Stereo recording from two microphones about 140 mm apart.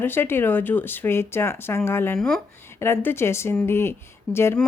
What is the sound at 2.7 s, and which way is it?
Speech, 20° left (ahead or behind).